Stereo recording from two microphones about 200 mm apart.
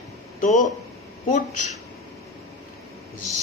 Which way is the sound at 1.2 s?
35° left (ahead or behind).